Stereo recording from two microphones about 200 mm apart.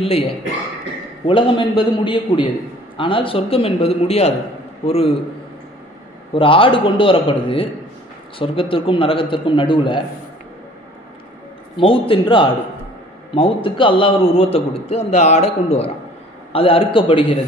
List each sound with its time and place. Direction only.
0.0 s a man's voice: 30° left (ahead or behind)
6.3 s a man's voice: 25° left (ahead or behind)
11.7 s a man's voice: 25° left (ahead or behind)